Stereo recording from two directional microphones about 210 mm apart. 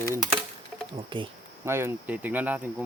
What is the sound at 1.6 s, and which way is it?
Speech, 10° right (ahead or behind).